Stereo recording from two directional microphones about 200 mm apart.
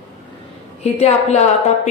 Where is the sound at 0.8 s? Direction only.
35° left (ahead or behind).